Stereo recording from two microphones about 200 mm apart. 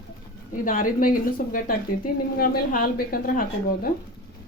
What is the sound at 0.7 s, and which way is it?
A woman's voice, 45° left (ahead or behind).